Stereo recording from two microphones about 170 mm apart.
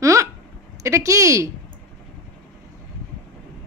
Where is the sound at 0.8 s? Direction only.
15° right (ahead or behind).